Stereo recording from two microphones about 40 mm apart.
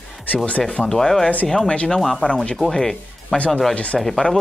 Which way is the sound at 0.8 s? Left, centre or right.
Centre.